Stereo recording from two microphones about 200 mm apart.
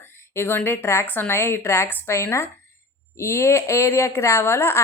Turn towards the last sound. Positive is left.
turn(degrees=10)  # may be behind; listen again after turning